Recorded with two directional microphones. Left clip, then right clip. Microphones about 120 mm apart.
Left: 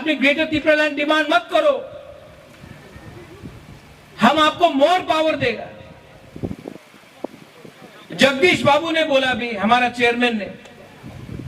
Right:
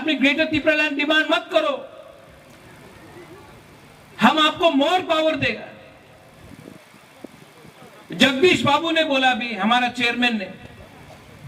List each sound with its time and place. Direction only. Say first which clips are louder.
0.0 s a man's voice: left 2 dB; 35° right (ahead or behind)
4.2 s a man's voice: left 2 dB; 35° right (ahead or behind)
8.4 s a man's voice: left 2 dB; 35° right (ahead or behind)